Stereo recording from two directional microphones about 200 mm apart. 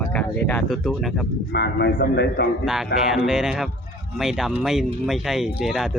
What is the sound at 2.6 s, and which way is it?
Speech, centre (ahead or behind).